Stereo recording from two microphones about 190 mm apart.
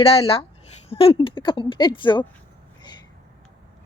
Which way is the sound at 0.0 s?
30° left (ahead or behind).